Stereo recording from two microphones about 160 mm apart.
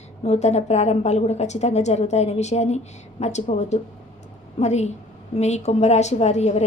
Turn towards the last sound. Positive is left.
turn(degrees=45)  # may be behind; listen again after turning